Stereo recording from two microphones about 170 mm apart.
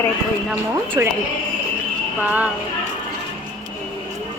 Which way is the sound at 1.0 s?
20° right (ahead or behind).